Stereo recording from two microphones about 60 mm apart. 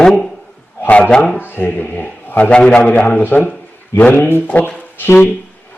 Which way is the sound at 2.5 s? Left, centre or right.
Centre.